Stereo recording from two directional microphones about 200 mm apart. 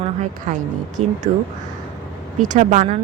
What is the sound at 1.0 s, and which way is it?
Speech, 35° right (ahead or behind).